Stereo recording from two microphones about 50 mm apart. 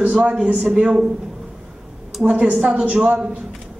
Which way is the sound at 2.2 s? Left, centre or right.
Right.